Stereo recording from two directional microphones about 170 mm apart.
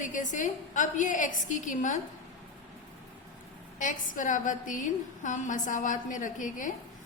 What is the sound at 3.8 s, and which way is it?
A woman's voice, 50° left (ahead or behind).